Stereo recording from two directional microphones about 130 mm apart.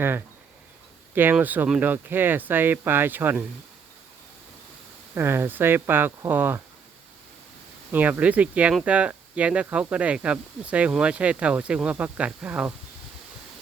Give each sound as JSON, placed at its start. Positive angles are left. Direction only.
{"t": 1.1, "sound": "speech", "side_deg": -15}
{"t": 5.1, "sound": "speech", "side_deg": -15}
{"t": 7.9, "sound": "speech", "side_deg": -15}